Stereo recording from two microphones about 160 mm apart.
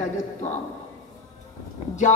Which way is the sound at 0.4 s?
45° left (ahead or behind).